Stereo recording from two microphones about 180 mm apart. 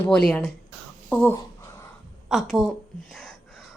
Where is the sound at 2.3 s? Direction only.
Centre (ahead or behind).